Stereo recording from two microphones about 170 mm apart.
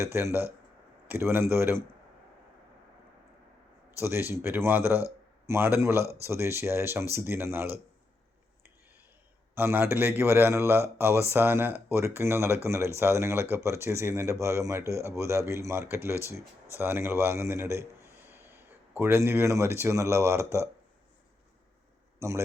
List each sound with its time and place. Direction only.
0.0 s speech: 15° right (ahead or behind)
4.0 s speech: 15° right (ahead or behind)
9.6 s a man's voice: 15° right (ahead or behind)
22.2 s speech: 15° right (ahead or behind)